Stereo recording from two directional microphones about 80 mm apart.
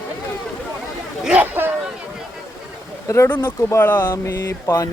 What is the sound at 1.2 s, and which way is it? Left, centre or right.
Chatter, centre.